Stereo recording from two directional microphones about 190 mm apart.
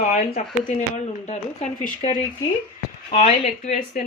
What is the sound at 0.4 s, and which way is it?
Speech, 40° left (ahead or behind).